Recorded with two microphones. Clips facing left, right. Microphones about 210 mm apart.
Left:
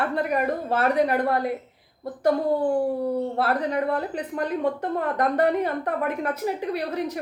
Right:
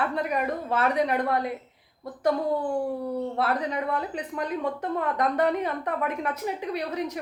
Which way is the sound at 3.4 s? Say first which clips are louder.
Left 3 dB; 55° left (ahead or behind).